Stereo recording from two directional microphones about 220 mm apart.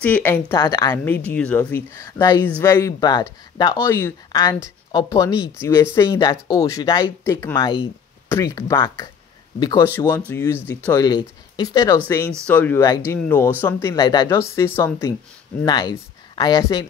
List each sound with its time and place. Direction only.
0.0 s speech: 5° left (ahead or behind)
12.4 s speech: 10° left (ahead or behind)